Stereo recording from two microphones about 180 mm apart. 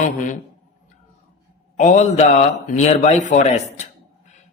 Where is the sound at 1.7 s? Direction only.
40° left (ahead or behind).